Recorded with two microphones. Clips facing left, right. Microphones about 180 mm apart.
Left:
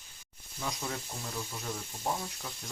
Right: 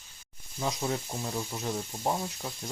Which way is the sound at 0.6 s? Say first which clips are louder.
Right 6 dB; 30° right (ahead or behind).